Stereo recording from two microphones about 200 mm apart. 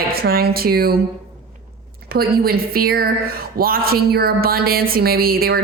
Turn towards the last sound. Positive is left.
turn(degrees=-50)  # may be behind; listen again after turning